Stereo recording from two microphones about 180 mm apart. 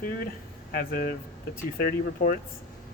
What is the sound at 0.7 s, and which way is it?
Speech, 55° left (ahead or behind).